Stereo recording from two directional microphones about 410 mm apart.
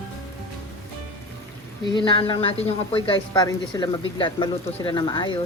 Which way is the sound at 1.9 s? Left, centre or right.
Centre.